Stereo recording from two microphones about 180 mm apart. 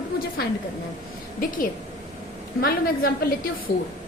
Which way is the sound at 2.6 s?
55° left (ahead or behind).